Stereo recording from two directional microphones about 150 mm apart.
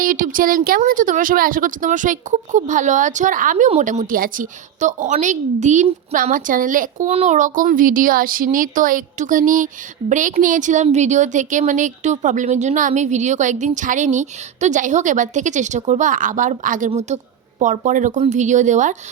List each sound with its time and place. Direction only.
0.0 s speech: 65° right (ahead or behind)
3.7 s speech: 50° right (ahead or behind)
7.1 s a woman's voice: 50° right (ahead or behind)